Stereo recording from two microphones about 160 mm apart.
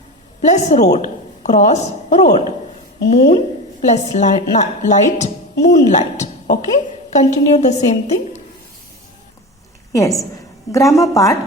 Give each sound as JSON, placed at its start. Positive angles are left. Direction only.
{"t": 0.4, "sound": "a woman's voice", "side_deg": 45}
{"t": 9.9, "sound": "a woman's voice", "side_deg": 20}